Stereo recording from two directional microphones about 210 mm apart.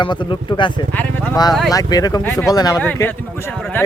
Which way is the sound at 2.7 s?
5° left (ahead or behind).